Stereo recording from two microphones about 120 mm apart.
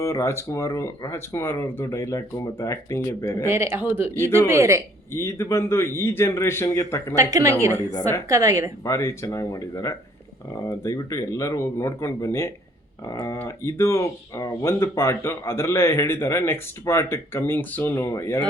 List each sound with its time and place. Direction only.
0.0 s speech: 25° left (ahead or behind)
3.5 s speech: 25° right (ahead or behind)
5.1 s speech: 25° left (ahead or behind)
7.2 s speech: 30° right (ahead or behind)
8.8 s speech: 25° left (ahead or behind)